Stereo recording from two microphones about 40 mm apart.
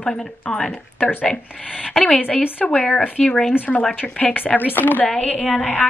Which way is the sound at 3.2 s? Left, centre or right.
Centre.